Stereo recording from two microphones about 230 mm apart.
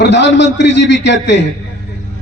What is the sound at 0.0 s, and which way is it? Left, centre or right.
A man's voice, left.